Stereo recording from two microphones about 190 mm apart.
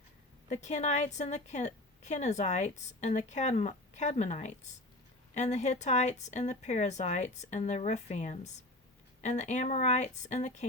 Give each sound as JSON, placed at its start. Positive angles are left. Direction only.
{"t": 0.4, "sound": "a woman's voice", "side_deg": 40}